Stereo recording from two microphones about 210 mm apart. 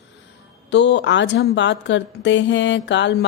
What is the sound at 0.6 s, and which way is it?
A woman's voice, 55° left (ahead or behind).